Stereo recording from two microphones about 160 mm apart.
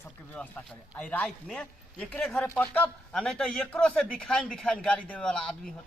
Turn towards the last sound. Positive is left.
turn(degrees=5)  # may be behind; listen again after turning